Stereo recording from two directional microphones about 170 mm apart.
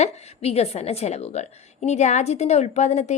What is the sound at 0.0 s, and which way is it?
A woman's voice, 40° left (ahead or behind).